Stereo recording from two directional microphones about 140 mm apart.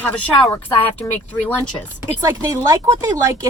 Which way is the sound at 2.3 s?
25° right (ahead or behind).